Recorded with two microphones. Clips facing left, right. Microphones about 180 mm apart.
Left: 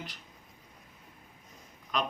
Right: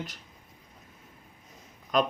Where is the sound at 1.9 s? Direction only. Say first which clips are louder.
Right 7 dB; 45° right (ahead or behind).